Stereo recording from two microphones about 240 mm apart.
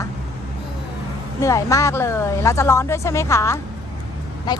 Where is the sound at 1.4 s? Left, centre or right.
Centre.